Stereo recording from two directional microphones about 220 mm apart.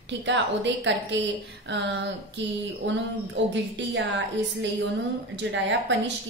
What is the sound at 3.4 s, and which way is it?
Speech, 55° right (ahead or behind).